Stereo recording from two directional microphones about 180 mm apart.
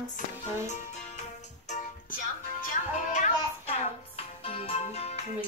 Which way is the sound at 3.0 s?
45° left (ahead or behind).